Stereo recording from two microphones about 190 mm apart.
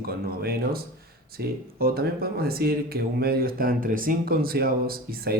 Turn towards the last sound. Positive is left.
turn(degrees=-55)  # may be behind; listen again after turning